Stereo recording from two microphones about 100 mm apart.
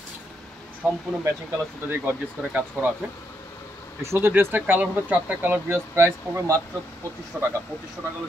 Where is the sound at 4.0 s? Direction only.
25° right (ahead or behind).